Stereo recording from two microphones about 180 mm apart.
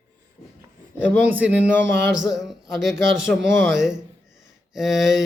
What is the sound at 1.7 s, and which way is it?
Speech, 15° left (ahead or behind).